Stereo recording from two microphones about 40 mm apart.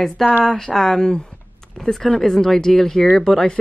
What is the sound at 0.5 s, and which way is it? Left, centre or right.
Speech, centre.